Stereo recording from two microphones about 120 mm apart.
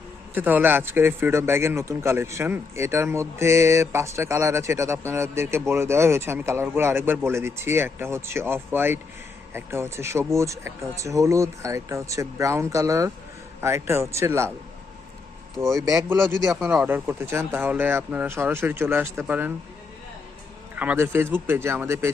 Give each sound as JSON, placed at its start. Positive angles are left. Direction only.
{"t": 0.3, "sound": "a man's voice", "side_deg": -15}
{"t": 15.7, "sound": "a man's voice", "side_deg": -25}
{"t": 20.7, "sound": "a man's voice", "side_deg": -15}